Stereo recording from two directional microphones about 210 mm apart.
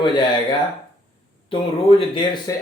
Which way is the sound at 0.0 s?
20° left (ahead or behind).